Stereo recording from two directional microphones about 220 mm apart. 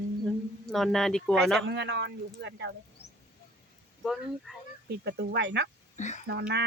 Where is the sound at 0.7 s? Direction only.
Centre (ahead or behind).